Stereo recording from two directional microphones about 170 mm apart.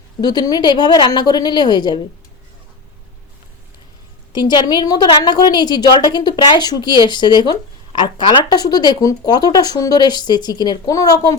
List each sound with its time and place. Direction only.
0.2 s a woman's voice: 25° left (ahead or behind)
4.3 s a woman's voice: 25° left (ahead or behind)